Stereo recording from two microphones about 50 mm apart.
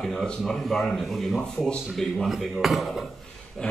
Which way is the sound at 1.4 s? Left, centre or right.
Centre.